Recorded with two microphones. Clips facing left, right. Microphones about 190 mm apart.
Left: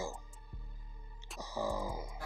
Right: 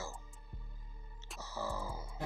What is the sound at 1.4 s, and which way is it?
Music, 15° left (ahead or behind).